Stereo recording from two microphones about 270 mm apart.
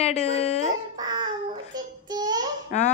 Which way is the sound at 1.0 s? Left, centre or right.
Centre.